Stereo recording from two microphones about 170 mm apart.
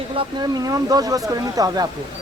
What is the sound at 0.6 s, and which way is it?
Speech, 20° right (ahead or behind).